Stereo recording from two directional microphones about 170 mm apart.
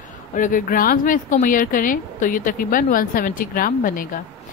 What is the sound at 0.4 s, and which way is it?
A woman's voice, 50° left (ahead or behind).